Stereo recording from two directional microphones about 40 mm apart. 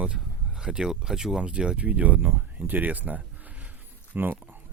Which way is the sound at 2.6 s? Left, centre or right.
Right.